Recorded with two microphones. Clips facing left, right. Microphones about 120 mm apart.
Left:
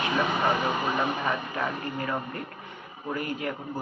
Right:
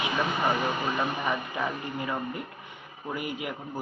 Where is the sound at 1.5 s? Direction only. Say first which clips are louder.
Left 1 dB; 15° right (ahead or behind).